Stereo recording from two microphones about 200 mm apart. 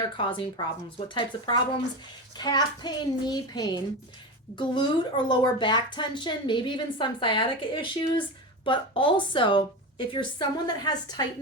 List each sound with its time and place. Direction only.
0.0 s a woman's voice: 25° left (ahead or behind)